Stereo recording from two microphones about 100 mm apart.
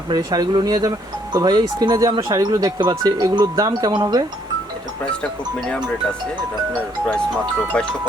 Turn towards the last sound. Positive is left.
turn(degrees=10)  # may be behind; listen again after turning